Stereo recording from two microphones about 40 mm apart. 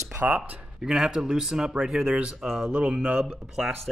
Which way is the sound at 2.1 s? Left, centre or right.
Right.